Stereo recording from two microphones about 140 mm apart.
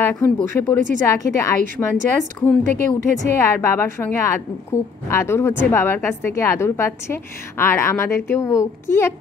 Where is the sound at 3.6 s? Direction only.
20° left (ahead or behind).